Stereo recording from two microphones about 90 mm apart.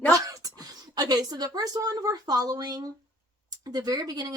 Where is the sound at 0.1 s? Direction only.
40° right (ahead or behind).